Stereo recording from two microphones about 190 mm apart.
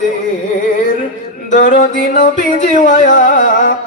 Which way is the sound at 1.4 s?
45° left (ahead or behind).